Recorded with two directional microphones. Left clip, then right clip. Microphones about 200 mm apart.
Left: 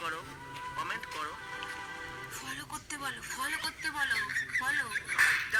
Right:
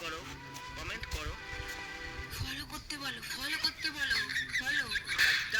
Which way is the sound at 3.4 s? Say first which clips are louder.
Even; 30° right (ahead or behind).